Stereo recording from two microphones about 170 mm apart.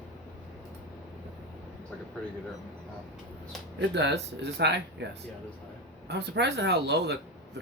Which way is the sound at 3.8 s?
90° right.